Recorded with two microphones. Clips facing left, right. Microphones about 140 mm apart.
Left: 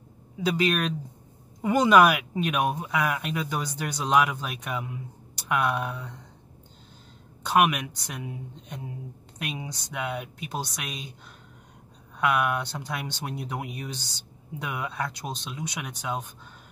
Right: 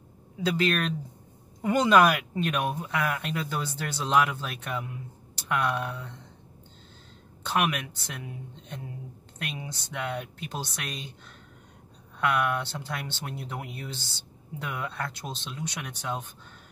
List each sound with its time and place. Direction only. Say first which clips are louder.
0.6 s speech: left 1 dB; 15° left (ahead or behind)
7.6 s speech: left 4 dB; 15° left (ahead or behind)
12.2 s speech: left 1 dB; 10° left (ahead or behind)